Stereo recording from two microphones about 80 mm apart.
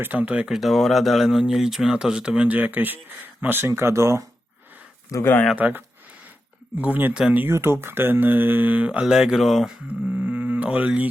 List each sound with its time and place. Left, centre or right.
0.0 s speech: right
0.5 s speech: centre; by 3.7 s right
3.7 s speech: right
5.2 s speech: left
5.5 s speech: centre
9.8 s a sound: centre